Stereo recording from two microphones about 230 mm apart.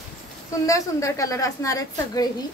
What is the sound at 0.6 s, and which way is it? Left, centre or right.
A woman's voice, centre.